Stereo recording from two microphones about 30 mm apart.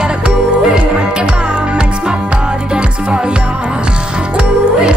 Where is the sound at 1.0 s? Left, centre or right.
Right.